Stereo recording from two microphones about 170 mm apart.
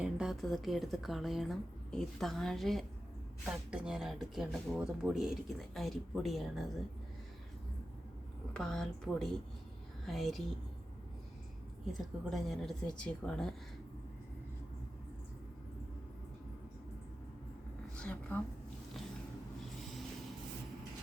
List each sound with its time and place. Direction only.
0.0 s speech: 5° right (ahead or behind)
8.5 s speech: 5° left (ahead or behind)
11.9 s speech: centre (ahead or behind)
17.9 s a woman's voice: 10° left (ahead or behind)